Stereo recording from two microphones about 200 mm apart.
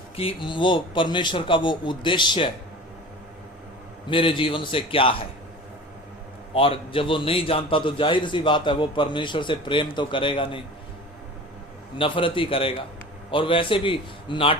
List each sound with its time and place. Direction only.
0.2 s a man's voice: 25° left (ahead or behind)
4.1 s a man's voice: 25° left (ahead or behind)
6.5 s a man's voice: 25° left (ahead or behind)
11.9 s a man's voice: 25° left (ahead or behind)